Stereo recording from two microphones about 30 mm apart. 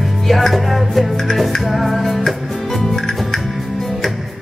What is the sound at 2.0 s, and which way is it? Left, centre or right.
Music, centre.